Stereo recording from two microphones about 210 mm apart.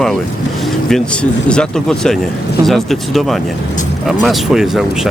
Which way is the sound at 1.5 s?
5° left (ahead or behind).